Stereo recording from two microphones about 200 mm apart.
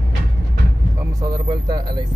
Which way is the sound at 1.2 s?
20° right (ahead or behind).